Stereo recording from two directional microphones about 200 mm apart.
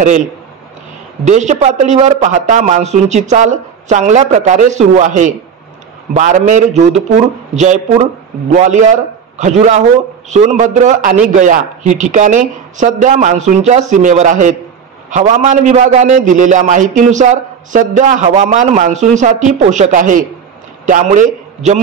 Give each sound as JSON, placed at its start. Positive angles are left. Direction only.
{"t": 1.2, "sound": "a man's voice", "side_deg": -35}